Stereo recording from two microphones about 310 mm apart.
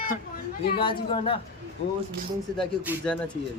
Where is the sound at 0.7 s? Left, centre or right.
Centre.